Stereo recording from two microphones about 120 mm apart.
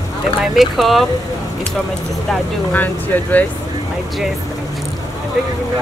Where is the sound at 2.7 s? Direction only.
15° left (ahead or behind).